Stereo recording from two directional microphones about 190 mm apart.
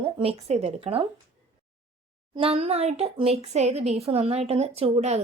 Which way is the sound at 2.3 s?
30° right (ahead or behind).